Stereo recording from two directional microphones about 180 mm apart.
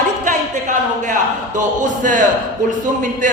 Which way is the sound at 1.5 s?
45° right (ahead or behind).